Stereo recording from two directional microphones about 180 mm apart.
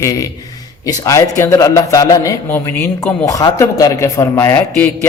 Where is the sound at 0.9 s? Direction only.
20° left (ahead or behind).